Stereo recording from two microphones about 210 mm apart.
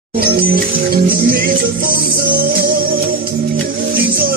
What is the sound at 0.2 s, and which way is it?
Music, 45° right (ahead or behind).